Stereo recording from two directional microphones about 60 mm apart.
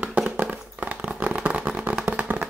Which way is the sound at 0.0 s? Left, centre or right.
Right.